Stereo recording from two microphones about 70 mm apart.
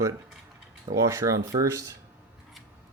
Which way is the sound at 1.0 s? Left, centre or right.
Right.